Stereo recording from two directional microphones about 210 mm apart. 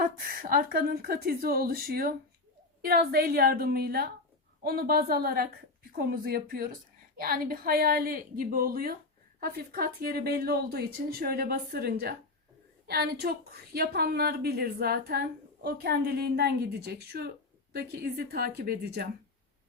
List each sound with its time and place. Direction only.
0.0 s a woman's voice: 45° right (ahead or behind)